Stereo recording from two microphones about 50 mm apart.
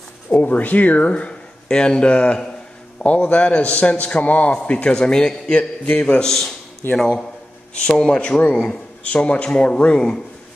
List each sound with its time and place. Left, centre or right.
0.3 s a man's voice: left
6.2 s speech: centre
8.2 s a man's voice: left